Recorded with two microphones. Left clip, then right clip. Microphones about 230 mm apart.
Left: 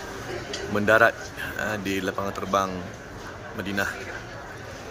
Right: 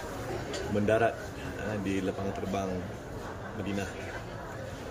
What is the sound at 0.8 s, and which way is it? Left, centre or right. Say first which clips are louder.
Speech: left 9 dB; left.